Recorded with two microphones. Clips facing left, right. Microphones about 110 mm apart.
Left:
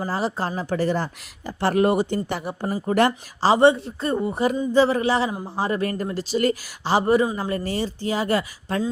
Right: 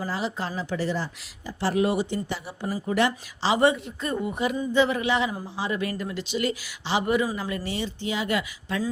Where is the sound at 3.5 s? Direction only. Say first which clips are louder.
Left 4 dB; 30° left (ahead or behind).